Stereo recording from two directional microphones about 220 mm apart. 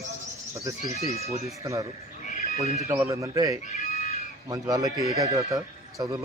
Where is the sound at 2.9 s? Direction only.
10° right (ahead or behind).